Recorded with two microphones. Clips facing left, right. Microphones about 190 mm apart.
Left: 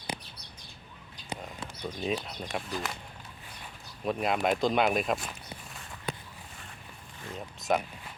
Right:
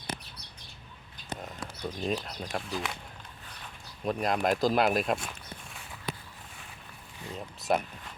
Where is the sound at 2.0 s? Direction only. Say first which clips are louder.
Even; centre (ahead or behind).